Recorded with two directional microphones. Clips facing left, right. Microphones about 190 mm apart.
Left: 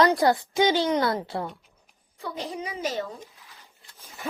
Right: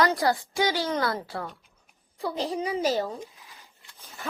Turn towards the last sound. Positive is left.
turn(degrees=-35)  # may be behind; listen again after turning